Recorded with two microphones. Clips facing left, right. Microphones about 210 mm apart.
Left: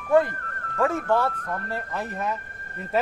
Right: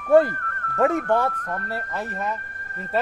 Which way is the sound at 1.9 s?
Centre (ahead or behind).